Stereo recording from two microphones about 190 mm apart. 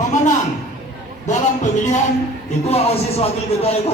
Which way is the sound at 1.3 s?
40° left (ahead or behind).